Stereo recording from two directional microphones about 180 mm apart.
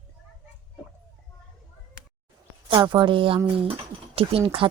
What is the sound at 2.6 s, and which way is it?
Speech, 25° right (ahead or behind).